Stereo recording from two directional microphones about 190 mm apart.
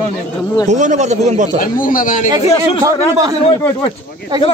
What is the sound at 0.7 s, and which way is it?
Speech, 40° right (ahead or behind).